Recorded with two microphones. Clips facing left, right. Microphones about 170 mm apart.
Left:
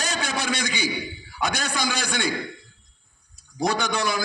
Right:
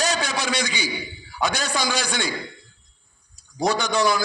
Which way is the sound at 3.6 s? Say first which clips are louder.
Right 4 dB; 55° left (ahead or behind).